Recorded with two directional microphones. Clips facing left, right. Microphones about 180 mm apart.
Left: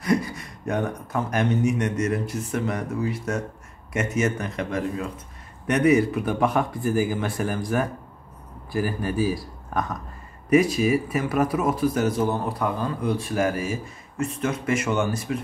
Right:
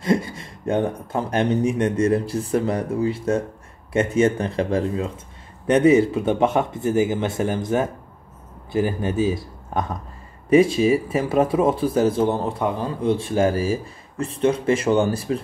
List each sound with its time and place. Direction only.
0.0 s speech: 25° right (ahead or behind)